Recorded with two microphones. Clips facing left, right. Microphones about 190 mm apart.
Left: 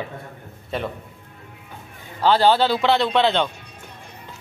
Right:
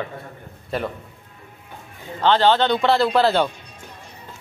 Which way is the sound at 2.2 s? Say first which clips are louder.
Even; 10° left (ahead or behind).